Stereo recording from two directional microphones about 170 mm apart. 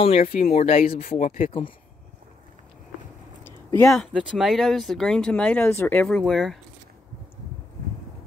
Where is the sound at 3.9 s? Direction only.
Centre (ahead or behind).